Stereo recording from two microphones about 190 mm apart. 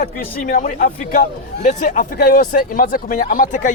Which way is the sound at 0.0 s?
45° left (ahead or behind).